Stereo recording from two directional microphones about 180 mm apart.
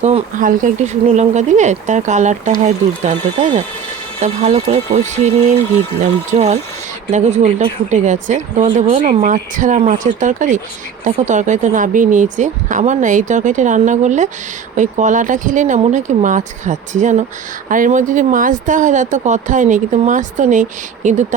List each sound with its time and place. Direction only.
0.0 s speech: 45° right (ahead or behind)